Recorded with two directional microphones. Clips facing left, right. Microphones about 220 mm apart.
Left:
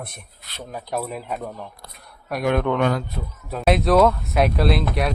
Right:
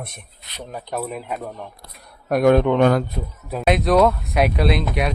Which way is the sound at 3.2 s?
20° right (ahead or behind).